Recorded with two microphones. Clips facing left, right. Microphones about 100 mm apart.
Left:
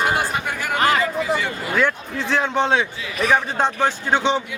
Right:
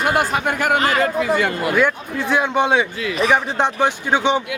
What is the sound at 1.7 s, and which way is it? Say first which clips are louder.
A man's voice: right 3 dB; 10° right (ahead or behind).